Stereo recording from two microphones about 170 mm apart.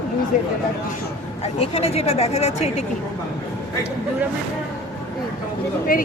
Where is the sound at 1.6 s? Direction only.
35° left (ahead or behind).